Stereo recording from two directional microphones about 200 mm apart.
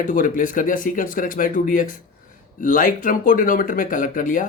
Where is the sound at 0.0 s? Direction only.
40° left (ahead or behind).